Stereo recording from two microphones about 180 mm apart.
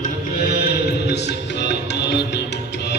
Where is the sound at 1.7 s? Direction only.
70° left (ahead or behind).